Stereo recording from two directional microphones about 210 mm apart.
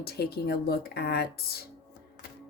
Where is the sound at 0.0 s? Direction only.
50° left (ahead or behind).